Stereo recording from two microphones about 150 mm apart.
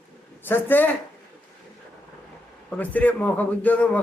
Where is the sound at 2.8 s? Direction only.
10° left (ahead or behind).